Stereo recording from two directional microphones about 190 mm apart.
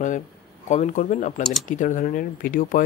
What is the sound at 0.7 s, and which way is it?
Speech, 40° left (ahead or behind).